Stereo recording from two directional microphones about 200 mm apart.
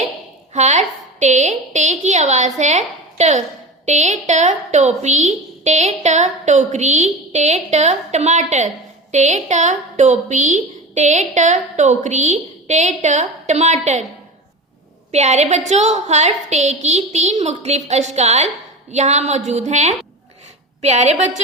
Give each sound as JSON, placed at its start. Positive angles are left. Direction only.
{"t": 0.5, "sound": "a woman's voice", "side_deg": -35}
{"t": 15.1, "sound": "a woman's voice", "side_deg": -35}